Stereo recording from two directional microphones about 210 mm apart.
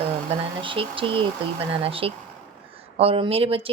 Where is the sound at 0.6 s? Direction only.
25° right (ahead or behind).